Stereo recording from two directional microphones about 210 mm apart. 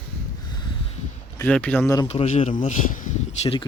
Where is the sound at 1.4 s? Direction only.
5° left (ahead or behind).